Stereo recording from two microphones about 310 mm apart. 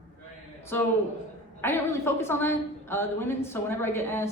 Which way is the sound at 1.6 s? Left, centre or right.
Centre.